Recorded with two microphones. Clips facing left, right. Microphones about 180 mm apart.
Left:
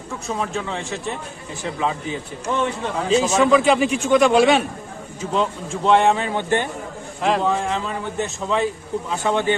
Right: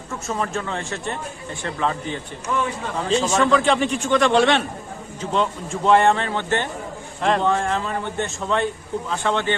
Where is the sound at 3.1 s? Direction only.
5° left (ahead or behind).